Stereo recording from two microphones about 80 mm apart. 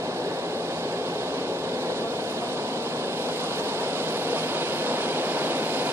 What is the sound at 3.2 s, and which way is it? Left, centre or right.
Vehicle, right.